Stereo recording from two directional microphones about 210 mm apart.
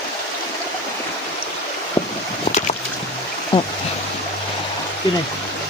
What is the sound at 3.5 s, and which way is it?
Stream, 20° left (ahead or behind).